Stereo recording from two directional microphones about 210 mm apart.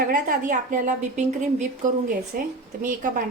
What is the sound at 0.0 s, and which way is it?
A woman's voice, 40° right (ahead or behind).